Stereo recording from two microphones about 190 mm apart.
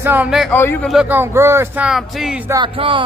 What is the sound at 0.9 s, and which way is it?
Speech, 5° right (ahead or behind).